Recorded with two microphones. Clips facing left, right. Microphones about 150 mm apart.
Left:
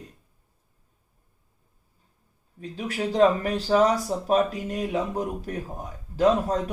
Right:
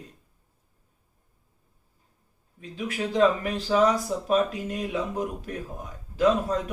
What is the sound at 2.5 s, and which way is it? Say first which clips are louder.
Speech: left 1 dB; 40° left (ahead or behind).